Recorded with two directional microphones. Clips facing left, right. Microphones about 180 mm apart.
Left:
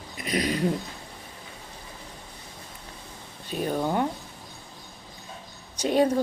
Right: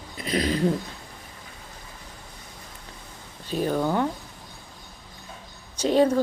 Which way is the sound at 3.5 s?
35° right (ahead or behind).